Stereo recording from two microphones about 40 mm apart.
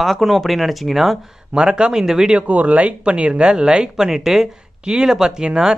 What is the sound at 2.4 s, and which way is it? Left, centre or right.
Speech, right.